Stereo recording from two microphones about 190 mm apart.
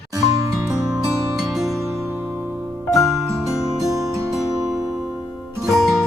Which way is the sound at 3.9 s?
15° right (ahead or behind).